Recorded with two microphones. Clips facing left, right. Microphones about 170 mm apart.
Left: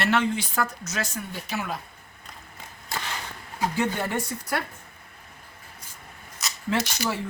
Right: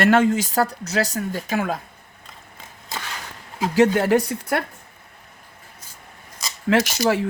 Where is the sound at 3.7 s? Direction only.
90° right; by 4.6 s 60° right (ahead or behind).